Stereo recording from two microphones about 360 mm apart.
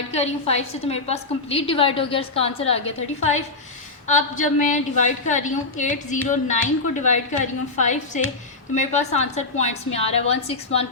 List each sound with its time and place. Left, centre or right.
0.1 s a woman's voice: centre